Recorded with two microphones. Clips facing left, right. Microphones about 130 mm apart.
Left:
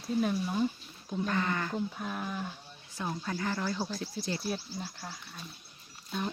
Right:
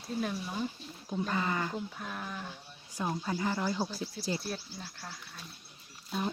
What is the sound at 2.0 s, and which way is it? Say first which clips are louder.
Speech: left 4 dB; 5° left (ahead or behind).